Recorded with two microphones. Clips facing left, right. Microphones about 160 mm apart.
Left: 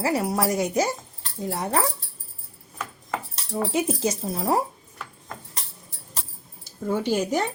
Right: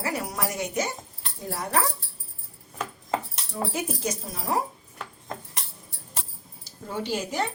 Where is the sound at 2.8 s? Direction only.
25° right (ahead or behind).